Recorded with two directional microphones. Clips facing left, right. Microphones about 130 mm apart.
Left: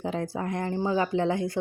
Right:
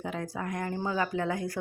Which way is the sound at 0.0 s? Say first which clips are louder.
Left 5 dB; 30° left (ahead or behind).